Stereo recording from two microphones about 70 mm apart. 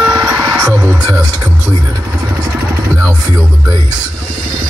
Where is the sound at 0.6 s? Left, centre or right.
Right.